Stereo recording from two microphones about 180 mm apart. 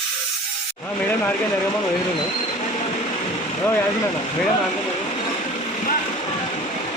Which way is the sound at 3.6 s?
10° left (ahead or behind).